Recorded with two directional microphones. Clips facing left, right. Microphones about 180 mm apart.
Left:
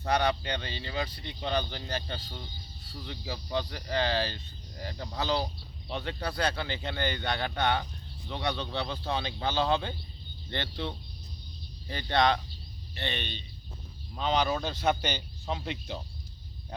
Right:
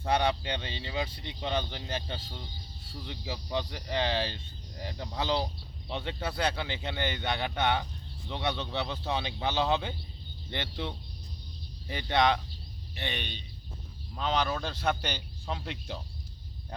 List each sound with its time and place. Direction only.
0.1 s speech: 25° right (ahead or behind); by 16.0 s centre (ahead or behind)